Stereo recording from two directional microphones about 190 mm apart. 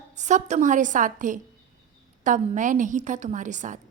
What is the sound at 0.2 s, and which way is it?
A woman's voice, 40° right (ahead or behind).